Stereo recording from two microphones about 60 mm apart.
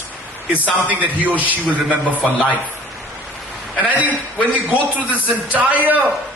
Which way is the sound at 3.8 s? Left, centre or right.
Right.